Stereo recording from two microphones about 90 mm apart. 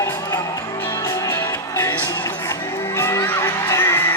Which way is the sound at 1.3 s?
25° left (ahead or behind).